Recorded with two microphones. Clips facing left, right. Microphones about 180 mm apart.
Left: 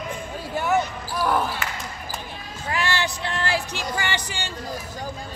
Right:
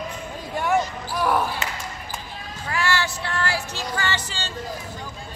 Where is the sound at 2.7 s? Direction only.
20° left (ahead or behind).